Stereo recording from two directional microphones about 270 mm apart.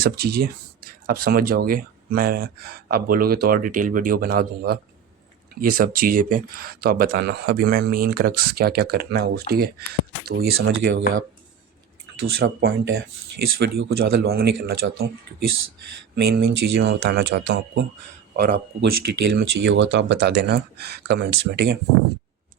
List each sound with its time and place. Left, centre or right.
0.0 s speech: right
12.4 s speech: right
16.1 s speech: right